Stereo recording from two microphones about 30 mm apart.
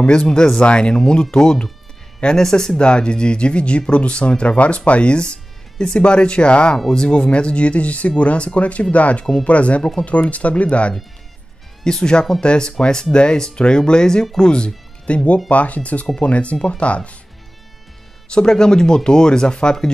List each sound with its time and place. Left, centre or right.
0.0 s speech: left; by 2.7 s centre
2.8 s speech: left
11.8 s speech: left
15.5 s speech: left
18.3 s speech: left